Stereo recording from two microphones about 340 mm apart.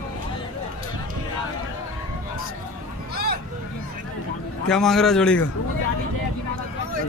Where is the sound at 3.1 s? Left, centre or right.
Right.